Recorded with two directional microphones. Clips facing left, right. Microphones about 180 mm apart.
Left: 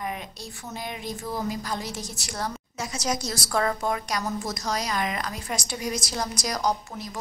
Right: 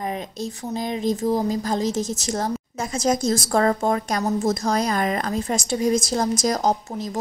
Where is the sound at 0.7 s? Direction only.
35° right (ahead or behind).